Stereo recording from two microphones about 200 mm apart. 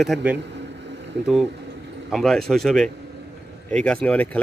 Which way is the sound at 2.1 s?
Centre (ahead or behind).